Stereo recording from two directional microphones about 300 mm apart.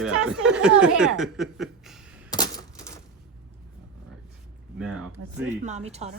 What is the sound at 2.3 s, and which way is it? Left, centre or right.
Coin, centre.